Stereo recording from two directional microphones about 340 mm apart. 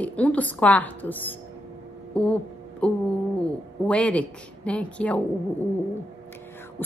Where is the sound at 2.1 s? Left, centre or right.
Centre.